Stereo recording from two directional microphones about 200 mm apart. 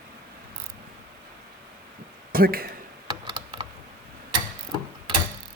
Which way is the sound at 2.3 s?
45° right (ahead or behind).